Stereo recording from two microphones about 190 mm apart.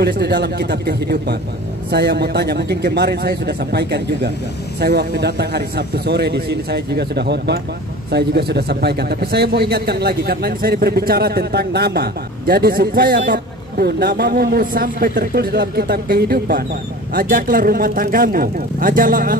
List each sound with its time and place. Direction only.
0.0 s a man's voice: 60° right (ahead or behind)